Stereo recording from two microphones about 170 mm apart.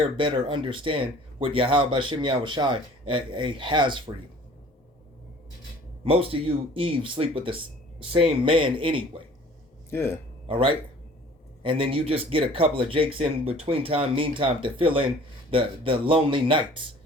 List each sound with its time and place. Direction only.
0.2 s speech: 30° right (ahead or behind)
6.3 s speech: 30° right (ahead or behind)
9.9 s speech: 15° left (ahead or behind)
10.5 s speech: 30° right (ahead or behind)